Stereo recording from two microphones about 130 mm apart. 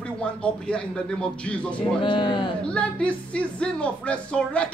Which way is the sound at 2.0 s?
35° left (ahead or behind).